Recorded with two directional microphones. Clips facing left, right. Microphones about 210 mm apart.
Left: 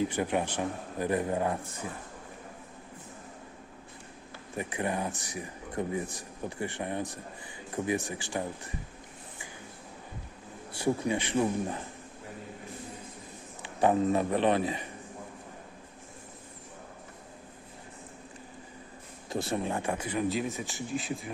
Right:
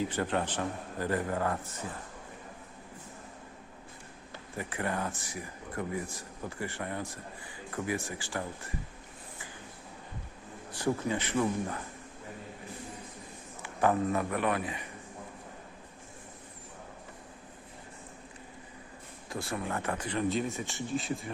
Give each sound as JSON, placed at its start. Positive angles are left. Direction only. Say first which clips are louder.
{"t": 0.1, "sound": "a man's voice", "louder": "left 2 dB", "side_deg": 15}
{"t": 4.5, "sound": "a man's voice", "louder": "left 2 dB", "side_deg": 15}
{"t": 10.7, "sound": "a man's voice", "louder": "left 2 dB", "side_deg": 15}
{"t": 13.6, "sound": "a man's voice", "louder": "left 2 dB", "side_deg": 25}
{"t": 19.3, "sound": "a man's voice", "louder": "left 4 dB", "side_deg": 20}